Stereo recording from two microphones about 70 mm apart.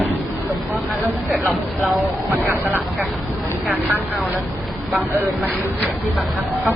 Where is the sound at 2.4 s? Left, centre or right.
Right.